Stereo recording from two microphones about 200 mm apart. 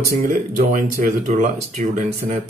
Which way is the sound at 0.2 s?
40° right (ahead or behind).